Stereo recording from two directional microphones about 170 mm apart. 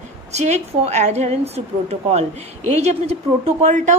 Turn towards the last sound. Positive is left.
turn(degrees=-40)  # may be behind; listen again after turning